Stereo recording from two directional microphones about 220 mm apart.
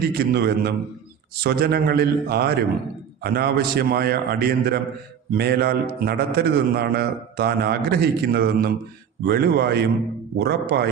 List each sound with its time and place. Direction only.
0.0 s a man's voice: 45° right (ahead or behind)